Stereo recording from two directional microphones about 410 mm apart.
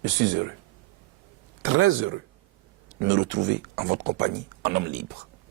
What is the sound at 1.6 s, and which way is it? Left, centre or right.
Speech, right.